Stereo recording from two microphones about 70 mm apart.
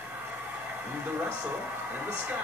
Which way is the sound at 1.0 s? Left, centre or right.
Right.